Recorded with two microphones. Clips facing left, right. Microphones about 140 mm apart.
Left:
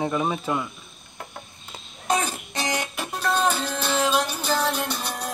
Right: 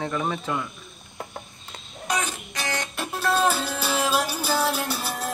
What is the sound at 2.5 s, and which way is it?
Music, 15° left (ahead or behind).